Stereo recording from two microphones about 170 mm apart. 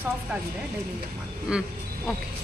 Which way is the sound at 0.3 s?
5° right (ahead or behind).